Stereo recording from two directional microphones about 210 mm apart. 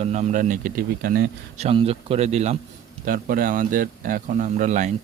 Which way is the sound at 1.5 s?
30° right (ahead or behind).